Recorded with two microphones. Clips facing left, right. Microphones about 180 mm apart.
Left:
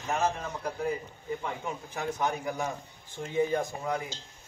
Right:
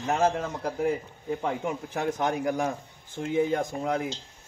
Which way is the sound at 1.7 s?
80° right.